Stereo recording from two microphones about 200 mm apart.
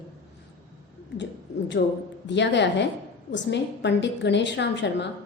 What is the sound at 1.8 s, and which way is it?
A woman's voice, 65° left (ahead or behind).